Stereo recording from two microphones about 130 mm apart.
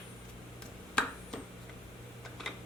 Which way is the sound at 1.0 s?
5° left (ahead or behind).